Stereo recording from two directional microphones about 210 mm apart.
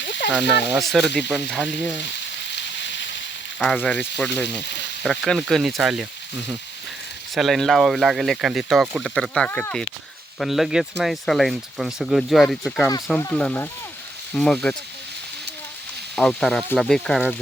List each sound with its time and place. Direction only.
0.0 s a sound: 55° left (ahead or behind)
0.7 s speech: centre (ahead or behind)
2.6 s a sound: 60° left (ahead or behind)
3.6 s speech: 5° left (ahead or behind)
5.0 s speech: centre (ahead or behind)
7.3 s speech: centre (ahead or behind)
16.1 s speech: centre (ahead or behind)